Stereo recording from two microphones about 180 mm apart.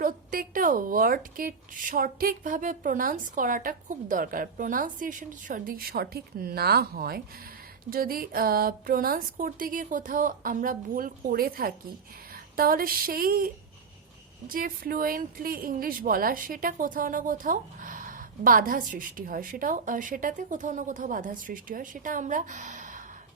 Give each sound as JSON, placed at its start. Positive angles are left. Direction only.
{"t": 0.0, "sound": "a woman's voice", "side_deg": -50}